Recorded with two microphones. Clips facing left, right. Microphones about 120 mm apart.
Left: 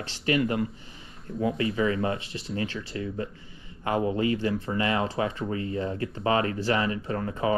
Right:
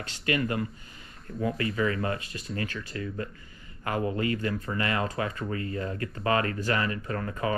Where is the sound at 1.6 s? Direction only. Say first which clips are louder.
Left 2 dB; 25° left (ahead or behind).